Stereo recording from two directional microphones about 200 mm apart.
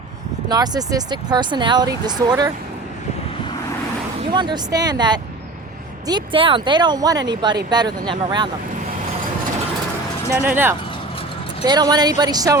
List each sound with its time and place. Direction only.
0.4 s speech: 20° right (ahead or behind)
4.2 s speech: 25° right (ahead or behind)
10.3 s speech: 10° right (ahead or behind)
11.6 s speech: 20° right (ahead or behind)